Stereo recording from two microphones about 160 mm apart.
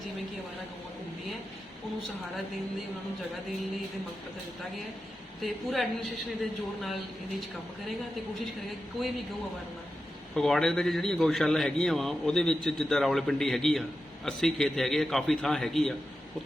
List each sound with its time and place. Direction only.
5.4 s a man's voice: centre (ahead or behind)
10.3 s a man's voice: 5° left (ahead or behind)